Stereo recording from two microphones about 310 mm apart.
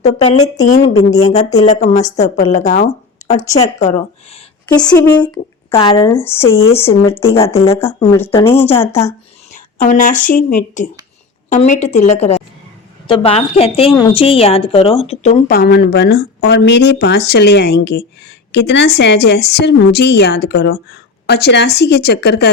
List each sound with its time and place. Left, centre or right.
0.4 s speech: centre
0.7 s a woman's voice: left
3.4 s speech: centre
3.8 s a woman's voice: left
4.8 s speech: centre
5.7 s speech: centre
7.3 s a woman's voice: centre
9.5 s a woman's voice: left